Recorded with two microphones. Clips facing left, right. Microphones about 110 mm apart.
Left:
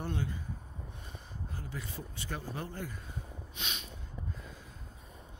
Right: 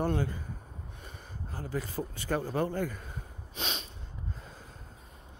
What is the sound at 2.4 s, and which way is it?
Speech, 80° right.